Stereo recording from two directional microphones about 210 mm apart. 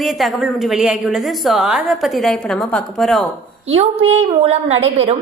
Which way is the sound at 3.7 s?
30° right (ahead or behind).